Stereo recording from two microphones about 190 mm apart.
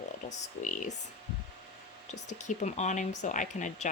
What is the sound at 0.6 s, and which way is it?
Speech, 40° left (ahead or behind).